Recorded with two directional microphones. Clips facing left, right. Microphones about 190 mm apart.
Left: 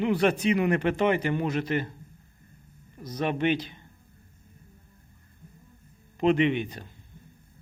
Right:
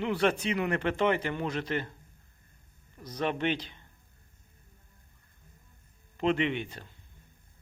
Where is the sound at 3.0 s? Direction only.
10° left (ahead or behind).